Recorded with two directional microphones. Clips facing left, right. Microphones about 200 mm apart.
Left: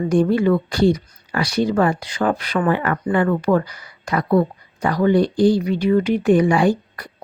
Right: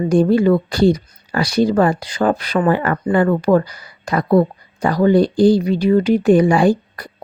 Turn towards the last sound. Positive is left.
turn(degrees=-35)  # may be behind; listen again after turning